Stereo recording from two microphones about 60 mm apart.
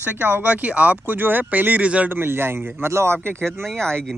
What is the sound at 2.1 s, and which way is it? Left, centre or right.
Speech, right.